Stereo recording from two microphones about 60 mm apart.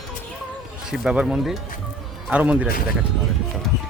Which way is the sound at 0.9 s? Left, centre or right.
Centre.